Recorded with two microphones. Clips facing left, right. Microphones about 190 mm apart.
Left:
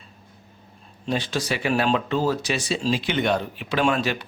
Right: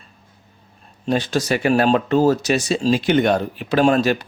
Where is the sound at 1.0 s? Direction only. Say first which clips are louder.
Right 6 dB; 45° right (ahead or behind).